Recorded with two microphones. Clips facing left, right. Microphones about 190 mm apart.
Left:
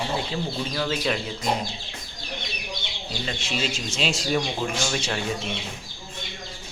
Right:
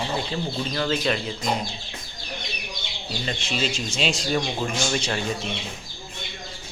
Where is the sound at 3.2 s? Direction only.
Centre (ahead or behind).